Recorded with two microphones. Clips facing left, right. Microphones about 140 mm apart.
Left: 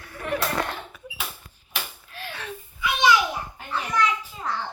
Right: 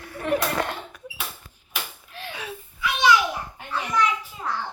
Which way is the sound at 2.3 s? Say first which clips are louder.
Right 1 dB; 10° right (ahead or behind).